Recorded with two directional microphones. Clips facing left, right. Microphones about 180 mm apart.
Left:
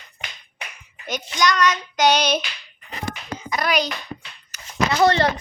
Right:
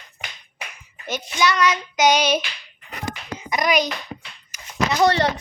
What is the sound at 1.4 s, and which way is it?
Child singing, 10° right (ahead or behind).